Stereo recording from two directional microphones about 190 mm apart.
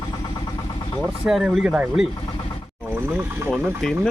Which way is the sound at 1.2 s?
Centre (ahead or behind).